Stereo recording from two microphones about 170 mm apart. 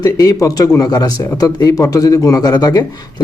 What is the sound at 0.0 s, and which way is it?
Speech, 20° left (ahead or behind).